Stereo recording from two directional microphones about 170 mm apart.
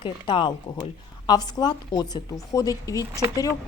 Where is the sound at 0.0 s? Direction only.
25° left (ahead or behind).